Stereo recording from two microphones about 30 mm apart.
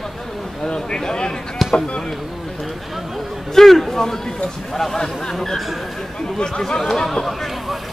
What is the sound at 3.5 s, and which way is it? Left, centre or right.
Speech, centre.